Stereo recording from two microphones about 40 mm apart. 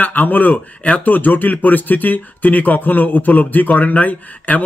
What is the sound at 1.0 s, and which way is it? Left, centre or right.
Speech, left.